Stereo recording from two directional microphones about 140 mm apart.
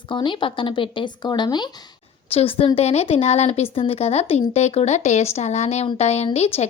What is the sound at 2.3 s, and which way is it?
A woman's voice, 45° left (ahead or behind).